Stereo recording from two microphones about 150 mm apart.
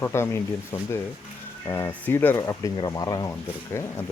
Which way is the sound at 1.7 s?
15° left (ahead or behind).